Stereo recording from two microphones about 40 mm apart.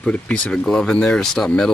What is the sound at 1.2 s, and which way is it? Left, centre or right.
Speech, centre.